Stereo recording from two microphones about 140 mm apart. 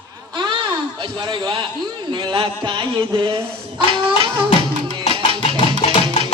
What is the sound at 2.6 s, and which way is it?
Speech, 35° right (ahead or behind).